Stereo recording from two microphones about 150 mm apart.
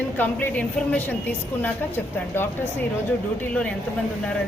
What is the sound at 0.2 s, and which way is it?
Speech, 10° left (ahead or behind).